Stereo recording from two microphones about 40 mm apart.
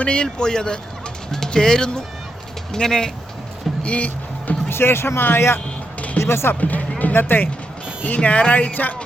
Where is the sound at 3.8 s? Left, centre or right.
Left.